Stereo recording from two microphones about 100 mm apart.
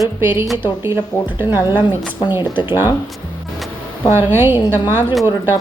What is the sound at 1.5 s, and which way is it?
Speech, 50° left (ahead or behind).